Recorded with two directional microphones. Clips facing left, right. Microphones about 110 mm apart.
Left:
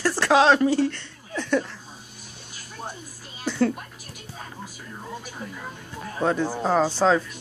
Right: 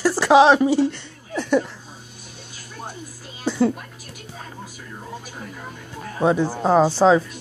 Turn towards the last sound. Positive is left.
turn(degrees=-15)  # may be behind; listen again after turning